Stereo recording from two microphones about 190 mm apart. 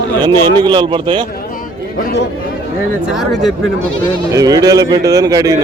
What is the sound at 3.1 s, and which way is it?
Speech, centre (ahead or behind).